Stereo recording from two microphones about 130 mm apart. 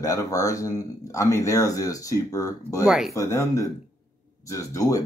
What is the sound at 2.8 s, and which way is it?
Speech, 5° right (ahead or behind).